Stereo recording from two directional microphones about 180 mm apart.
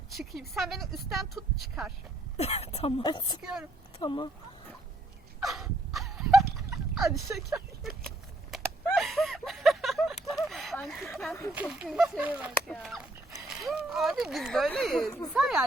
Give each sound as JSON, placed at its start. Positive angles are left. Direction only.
{"t": 0.1, "sound": "speech", "side_deg": 0}
{"t": 2.4, "sound": "a woman's voice", "side_deg": 35}
{"t": 3.4, "sound": "speech", "side_deg": -5}
{"t": 4.0, "sound": "a woman's voice", "side_deg": 25}
{"t": 5.4, "sound": "dog", "side_deg": 0}
{"t": 6.9, "sound": "speech", "side_deg": 0}
{"t": 8.4, "sound": "a sound", "side_deg": 0}
{"t": 11.7, "sound": "speech", "side_deg": -5}
{"t": 12.5, "sound": "speech", "side_deg": 5}